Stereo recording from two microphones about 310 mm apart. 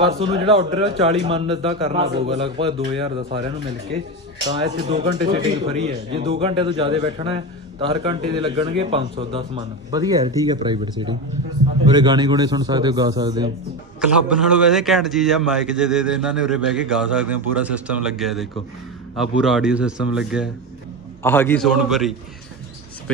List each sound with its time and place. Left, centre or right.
0.0 s a man's voice: centre
4.6 s a man's voice: centre